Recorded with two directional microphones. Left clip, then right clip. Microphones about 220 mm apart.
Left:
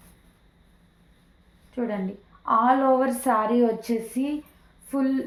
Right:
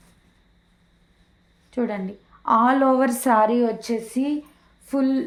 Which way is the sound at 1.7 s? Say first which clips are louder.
Right 3 dB; 45° right (ahead or behind).